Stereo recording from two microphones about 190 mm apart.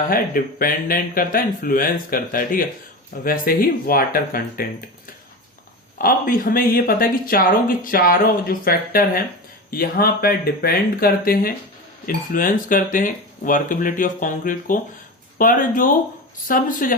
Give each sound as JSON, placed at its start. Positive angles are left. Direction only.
{"t": 0.1, "sound": "speech", "side_deg": 50}
{"t": 6.0, "sound": "speech", "side_deg": 50}